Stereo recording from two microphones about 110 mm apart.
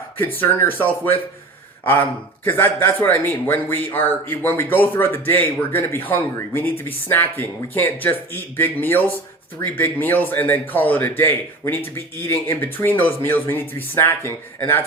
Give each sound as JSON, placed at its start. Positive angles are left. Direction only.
{"t": 0.2, "sound": "a man's voice", "side_deg": 20}